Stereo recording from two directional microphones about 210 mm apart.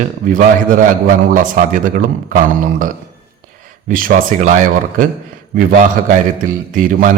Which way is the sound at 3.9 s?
40° right (ahead or behind).